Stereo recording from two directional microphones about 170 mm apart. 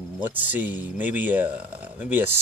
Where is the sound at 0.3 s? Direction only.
10° right (ahead or behind).